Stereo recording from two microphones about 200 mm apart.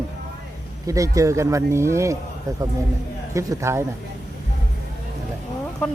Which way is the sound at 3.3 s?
15° right (ahead or behind).